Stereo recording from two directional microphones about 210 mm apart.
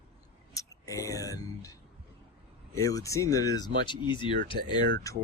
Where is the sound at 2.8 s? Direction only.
15° left (ahead or behind).